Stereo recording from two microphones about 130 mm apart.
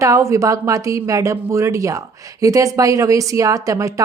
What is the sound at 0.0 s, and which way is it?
Speech, 25° right (ahead or behind).